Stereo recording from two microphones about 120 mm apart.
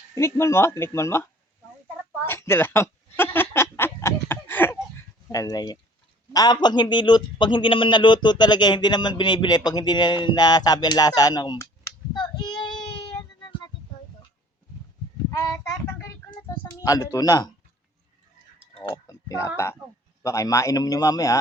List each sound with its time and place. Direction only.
0.1 s speech: 25° left (ahead or behind)
2.2 s a sound: 20° left (ahead or behind)
5.3 s a man's voice: 30° left (ahead or behind)
12.1 s child singing: 35° left (ahead or behind)
15.9 s a child's voice: 25° left (ahead or behind)
18.9 s speech: 30° left (ahead or behind)